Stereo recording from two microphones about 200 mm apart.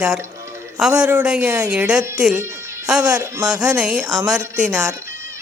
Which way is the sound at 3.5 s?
5° right (ahead or behind).